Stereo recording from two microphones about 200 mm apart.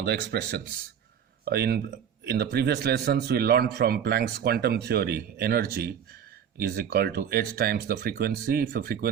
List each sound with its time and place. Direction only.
0.0 s a man's voice: 55° right (ahead or behind)